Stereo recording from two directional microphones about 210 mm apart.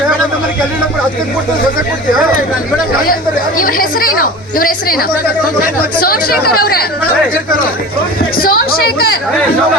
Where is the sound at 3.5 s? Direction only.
40° left (ahead or behind).